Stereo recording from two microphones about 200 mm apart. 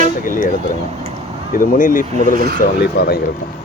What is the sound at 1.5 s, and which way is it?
Speech, 45° left (ahead or behind).